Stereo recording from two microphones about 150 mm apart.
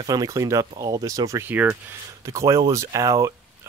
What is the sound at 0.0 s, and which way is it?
Speech, 25° right (ahead or behind).